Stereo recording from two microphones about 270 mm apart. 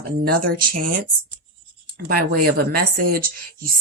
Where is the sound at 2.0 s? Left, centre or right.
Right.